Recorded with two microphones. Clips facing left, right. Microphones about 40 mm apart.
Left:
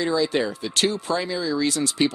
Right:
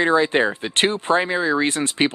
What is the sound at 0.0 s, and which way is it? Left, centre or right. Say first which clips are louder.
Speech: right 5 dB; right.